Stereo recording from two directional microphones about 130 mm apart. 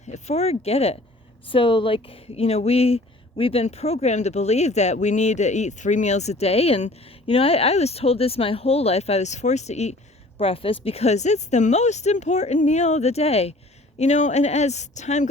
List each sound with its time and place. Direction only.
0.1 s speech: 55° left (ahead or behind)
1.5 s speech: 40° left (ahead or behind); by 9.9 s 60° left (ahead or behind)
10.3 s speech: 45° left (ahead or behind)
14.0 s speech: 65° left (ahead or behind)